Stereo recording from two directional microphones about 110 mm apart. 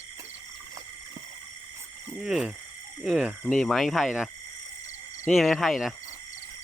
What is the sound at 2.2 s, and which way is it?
Speech, 5° right (ahead or behind).